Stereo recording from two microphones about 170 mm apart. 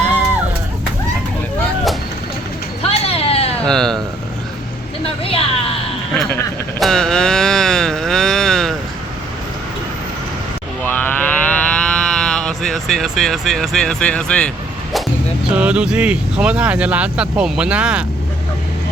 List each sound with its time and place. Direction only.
2.8 s a sound: 35° left (ahead or behind)
3.7 s speech: 5° left (ahead or behind)
5.0 s vehicle: 35° left (ahead or behind)
6.1 s a sound: 5° left (ahead or behind)
10.8 s livestock: 10° left (ahead or behind)
15.5 s speech: 5° right (ahead or behind)